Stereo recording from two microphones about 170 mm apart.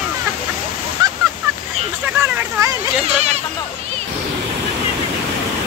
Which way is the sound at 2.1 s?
10° right (ahead or behind).